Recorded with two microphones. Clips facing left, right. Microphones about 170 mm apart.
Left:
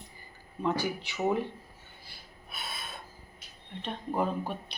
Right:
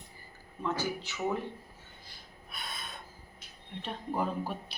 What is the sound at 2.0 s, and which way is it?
Snort, 5° left (ahead or behind).